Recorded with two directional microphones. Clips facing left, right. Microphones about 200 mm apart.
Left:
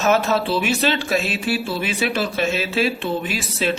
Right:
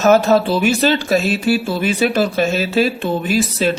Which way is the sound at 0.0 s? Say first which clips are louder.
Right 6 dB; 40° right (ahead or behind).